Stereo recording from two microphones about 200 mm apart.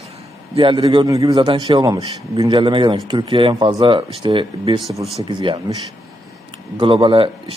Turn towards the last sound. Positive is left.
turn(degrees=-25)  # may be behind; listen again after turning